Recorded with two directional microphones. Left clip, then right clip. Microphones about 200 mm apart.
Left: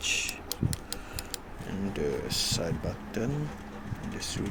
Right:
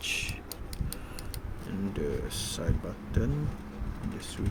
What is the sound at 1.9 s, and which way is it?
Speech, 15° right (ahead or behind).